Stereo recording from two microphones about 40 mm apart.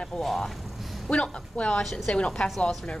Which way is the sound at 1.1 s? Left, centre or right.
Left.